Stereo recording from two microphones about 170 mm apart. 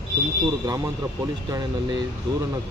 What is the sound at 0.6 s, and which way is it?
Speech, 20° right (ahead or behind).